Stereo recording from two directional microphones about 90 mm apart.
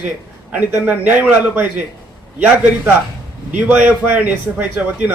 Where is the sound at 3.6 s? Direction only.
15° right (ahead or behind).